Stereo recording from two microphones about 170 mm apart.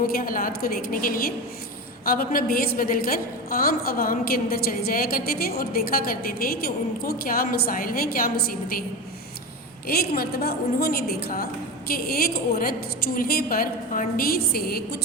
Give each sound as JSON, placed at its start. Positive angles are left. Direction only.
{"t": 0.1, "sound": "a woman's voice", "side_deg": 55}
{"t": 9.8, "sound": "a woman's voice", "side_deg": 60}